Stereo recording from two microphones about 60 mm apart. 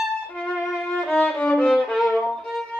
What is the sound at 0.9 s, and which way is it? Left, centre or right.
Violin, centre.